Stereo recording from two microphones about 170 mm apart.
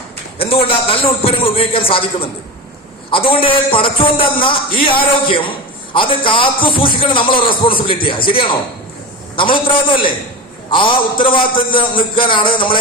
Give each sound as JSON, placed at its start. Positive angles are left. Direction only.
{"t": 0.3, "sound": "a man's voice", "side_deg": 35}